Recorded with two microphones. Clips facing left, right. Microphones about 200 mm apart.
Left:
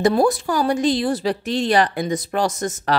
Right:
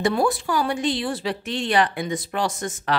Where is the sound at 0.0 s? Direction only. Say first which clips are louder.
Left 4 dB; 40° left (ahead or behind).